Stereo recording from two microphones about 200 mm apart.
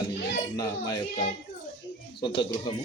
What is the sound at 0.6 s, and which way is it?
Speech, 15° left (ahead or behind).